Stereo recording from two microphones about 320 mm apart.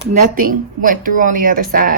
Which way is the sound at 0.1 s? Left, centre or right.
Right.